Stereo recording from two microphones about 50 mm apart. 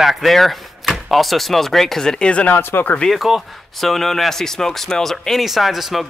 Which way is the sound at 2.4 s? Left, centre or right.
Left.